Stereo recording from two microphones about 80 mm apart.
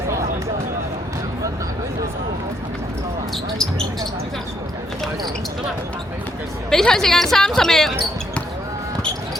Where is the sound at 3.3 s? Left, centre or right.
Centre.